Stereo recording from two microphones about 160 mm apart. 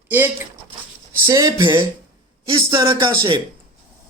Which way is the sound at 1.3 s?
20° right (ahead or behind).